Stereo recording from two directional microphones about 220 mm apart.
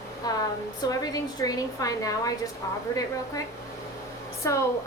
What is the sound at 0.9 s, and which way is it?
A woman's voice, 15° left (ahead or behind).